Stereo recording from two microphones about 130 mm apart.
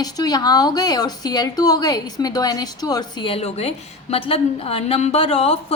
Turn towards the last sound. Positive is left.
turn(degrees=50)  # may be behind; listen again after turning